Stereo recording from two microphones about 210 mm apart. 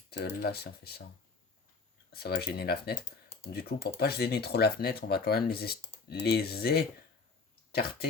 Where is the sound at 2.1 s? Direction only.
50° left (ahead or behind).